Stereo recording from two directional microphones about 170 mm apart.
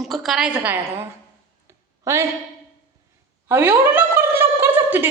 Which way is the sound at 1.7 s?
15° right (ahead or behind).